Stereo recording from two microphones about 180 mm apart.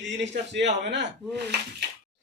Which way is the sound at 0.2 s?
75° right (ahead or behind).